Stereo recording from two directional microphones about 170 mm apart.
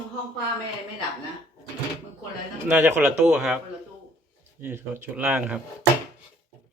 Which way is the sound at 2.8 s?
10° right (ahead or behind).